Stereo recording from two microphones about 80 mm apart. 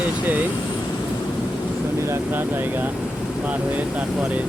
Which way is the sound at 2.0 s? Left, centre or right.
Right.